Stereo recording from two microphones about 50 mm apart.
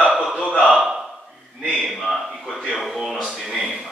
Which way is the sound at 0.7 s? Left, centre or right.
Centre.